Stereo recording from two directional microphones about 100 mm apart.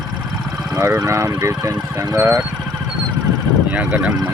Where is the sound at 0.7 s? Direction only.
20° right (ahead or behind).